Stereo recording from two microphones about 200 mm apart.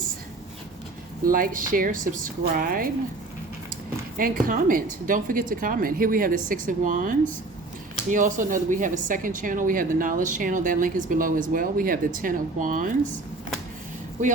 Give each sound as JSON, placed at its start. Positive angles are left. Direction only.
{"t": 1.2, "sound": "a woman's voice", "side_deg": -45}
{"t": 4.2, "sound": "a woman's voice", "side_deg": -45}